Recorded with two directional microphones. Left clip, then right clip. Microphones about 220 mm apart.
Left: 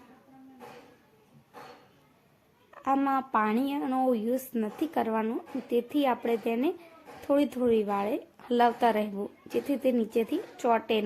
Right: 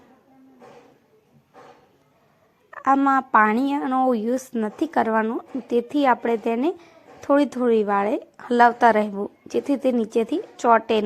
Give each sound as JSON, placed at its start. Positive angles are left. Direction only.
{"t": 2.7, "sound": "a woman's voice", "side_deg": -20}